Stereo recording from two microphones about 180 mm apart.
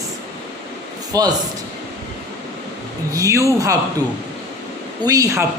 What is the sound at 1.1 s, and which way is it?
Speech, 20° right (ahead or behind).